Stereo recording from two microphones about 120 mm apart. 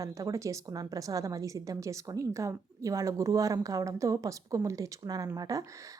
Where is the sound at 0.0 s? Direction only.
25° right (ahead or behind).